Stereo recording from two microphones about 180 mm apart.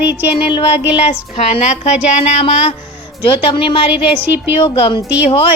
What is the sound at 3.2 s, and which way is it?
Speech, 30° left (ahead or behind).